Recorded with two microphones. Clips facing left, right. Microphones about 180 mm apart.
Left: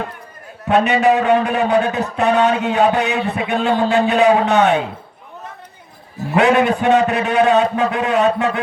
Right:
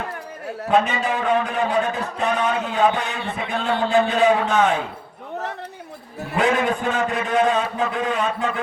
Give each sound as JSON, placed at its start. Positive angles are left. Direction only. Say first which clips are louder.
{"t": 0.9, "sound": "a man's voice", "louder": "left 8 dB", "side_deg": 70}
{"t": 6.3, "sound": "a man's voice", "louder": "left 6 dB", "side_deg": 70}